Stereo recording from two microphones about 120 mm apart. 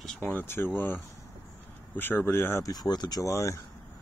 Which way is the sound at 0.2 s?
15° left (ahead or behind).